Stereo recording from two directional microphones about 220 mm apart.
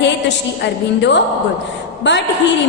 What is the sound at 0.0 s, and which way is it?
A woman's voice, 55° left (ahead or behind).